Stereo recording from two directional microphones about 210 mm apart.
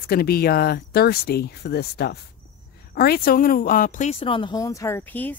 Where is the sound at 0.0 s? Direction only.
45° left (ahead or behind).